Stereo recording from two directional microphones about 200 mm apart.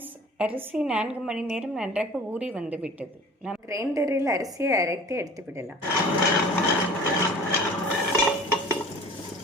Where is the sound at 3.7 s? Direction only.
15° right (ahead or behind).